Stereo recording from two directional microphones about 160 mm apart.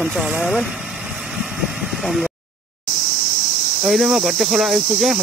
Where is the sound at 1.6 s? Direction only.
Centre (ahead or behind).